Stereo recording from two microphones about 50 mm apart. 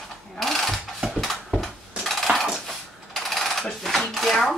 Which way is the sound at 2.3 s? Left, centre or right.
Right.